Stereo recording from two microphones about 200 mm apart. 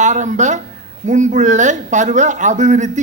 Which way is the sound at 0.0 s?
35° right (ahead or behind).